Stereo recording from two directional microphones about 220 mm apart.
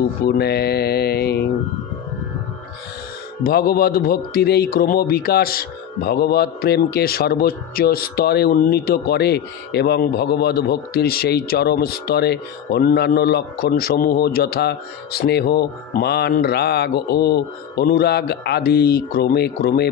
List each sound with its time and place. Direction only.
0.2 s a man's voice: 45° left (ahead or behind)
3.4 s a man's voice: 45° left (ahead or behind)